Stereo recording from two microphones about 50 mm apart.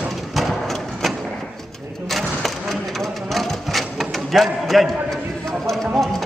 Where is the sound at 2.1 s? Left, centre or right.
Centre.